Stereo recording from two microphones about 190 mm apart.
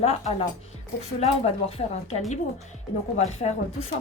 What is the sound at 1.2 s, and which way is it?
Speech, 35° left (ahead or behind).